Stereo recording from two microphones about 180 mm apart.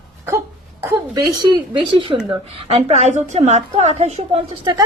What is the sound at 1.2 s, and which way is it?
A woman's voice, 25° right (ahead or behind).